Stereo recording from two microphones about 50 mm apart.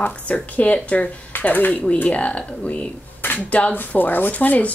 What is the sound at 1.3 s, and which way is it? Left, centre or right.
Speech, left.